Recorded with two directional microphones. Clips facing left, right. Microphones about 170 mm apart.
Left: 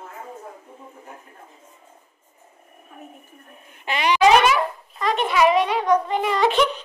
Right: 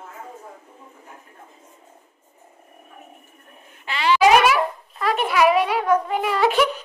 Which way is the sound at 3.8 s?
20° left (ahead or behind).